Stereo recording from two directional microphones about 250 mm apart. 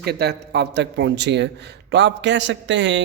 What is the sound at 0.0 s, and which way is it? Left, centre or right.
Speech, right.